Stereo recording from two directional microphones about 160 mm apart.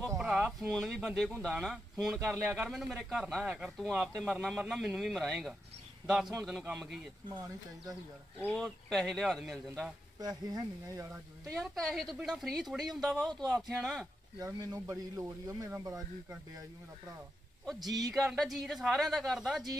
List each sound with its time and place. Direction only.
0.2 s a sound: centre (ahead or behind)
1.0 s a man's voice: centre (ahead or behind)
8.4 s a man's voice: 5° left (ahead or behind)
10.2 s a man's voice: 25° right (ahead or behind)
11.5 s a man's voice: centre (ahead or behind)
14.4 s a man's voice: 25° right (ahead or behind)
17.7 s a man's voice: 25° right (ahead or behind)
18.1 s a man's voice: centre (ahead or behind)